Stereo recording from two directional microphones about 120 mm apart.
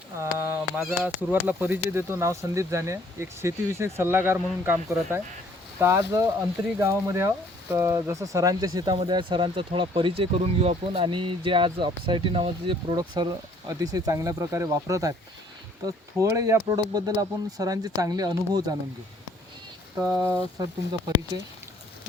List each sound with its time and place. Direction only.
0.2 s honk: 20° right (ahead or behind)
0.9 s speech: 15° right (ahead or behind)
16.2 s speech: 25° right (ahead or behind)
20.0 s speech: 25° right (ahead or behind)